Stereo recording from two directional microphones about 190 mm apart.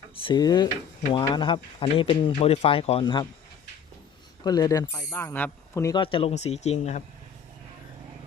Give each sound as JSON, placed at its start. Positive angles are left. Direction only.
{"t": 0.2, "sound": "speech", "side_deg": 25}
{"t": 4.4, "sound": "speech", "side_deg": 20}
{"t": 6.0, "sound": "speech", "side_deg": 30}